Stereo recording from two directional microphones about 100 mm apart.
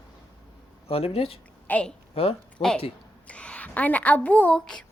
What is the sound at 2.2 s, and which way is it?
Speech, 75° left (ahead or behind).